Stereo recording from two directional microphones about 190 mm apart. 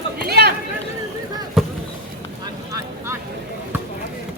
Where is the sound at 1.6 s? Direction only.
Centre (ahead or behind).